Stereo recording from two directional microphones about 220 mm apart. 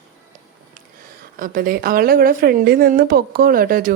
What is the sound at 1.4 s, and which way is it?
Speech, 40° right (ahead or behind).